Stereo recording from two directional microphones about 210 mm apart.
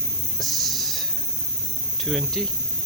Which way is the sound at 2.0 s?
Centre (ahead or behind).